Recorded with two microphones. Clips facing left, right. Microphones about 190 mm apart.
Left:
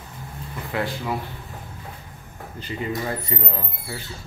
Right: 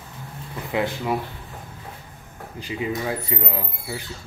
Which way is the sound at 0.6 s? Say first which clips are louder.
Right 3 dB; 20° right (ahead or behind).